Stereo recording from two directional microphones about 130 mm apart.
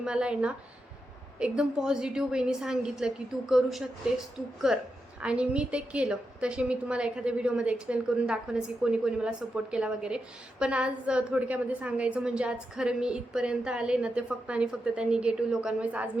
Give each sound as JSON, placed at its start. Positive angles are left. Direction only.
{"t": 0.0, "sound": "a woman's voice", "side_deg": -5}